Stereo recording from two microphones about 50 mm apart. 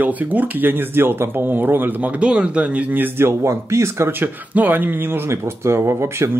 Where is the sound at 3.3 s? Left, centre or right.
Right.